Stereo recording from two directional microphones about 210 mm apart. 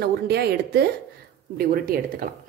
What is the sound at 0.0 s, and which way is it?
A woman's voice, 50° right (ahead or behind).